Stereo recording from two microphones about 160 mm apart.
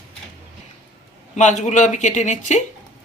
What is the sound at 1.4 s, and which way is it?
Speech, 50° left (ahead or behind).